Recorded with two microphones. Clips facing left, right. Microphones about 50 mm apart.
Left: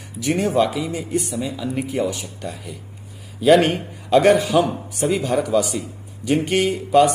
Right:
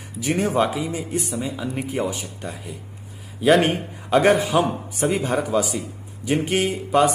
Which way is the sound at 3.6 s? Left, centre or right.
Right.